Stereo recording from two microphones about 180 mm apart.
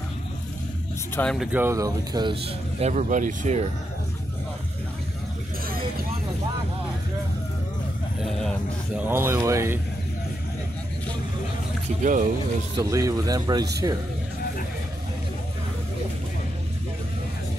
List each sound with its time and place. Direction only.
1.1 s speech: 5° left (ahead or behind)
1.6 s speech: 15° right (ahead or behind)
2.8 s speech: 40° right (ahead or behind)
8.2 s a sound: centre (ahead or behind)
9.1 s speech: 15° right (ahead or behind)
12.0 s speech: 45° right (ahead or behind)
12.7 s speech: 20° right (ahead or behind)